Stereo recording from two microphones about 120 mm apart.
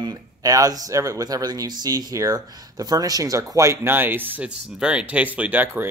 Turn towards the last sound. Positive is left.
turn(degrees=-15)  # may be behind; listen again after turning